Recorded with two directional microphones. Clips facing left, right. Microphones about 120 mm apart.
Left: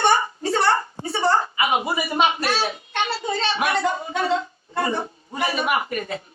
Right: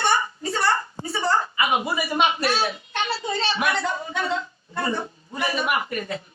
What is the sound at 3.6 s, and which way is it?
A woman's voice, 25° left (ahead or behind).